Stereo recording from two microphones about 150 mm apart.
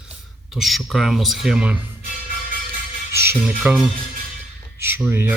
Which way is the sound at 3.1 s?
15° right (ahead or behind).